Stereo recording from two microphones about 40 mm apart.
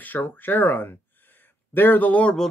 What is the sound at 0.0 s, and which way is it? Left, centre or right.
Speech, left.